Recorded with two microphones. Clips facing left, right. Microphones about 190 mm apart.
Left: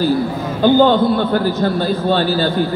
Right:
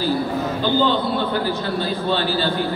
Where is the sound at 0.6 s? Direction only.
50° left (ahead or behind).